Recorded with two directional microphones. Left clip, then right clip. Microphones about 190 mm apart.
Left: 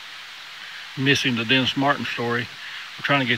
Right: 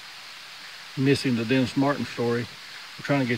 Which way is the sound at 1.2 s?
Centre (ahead or behind).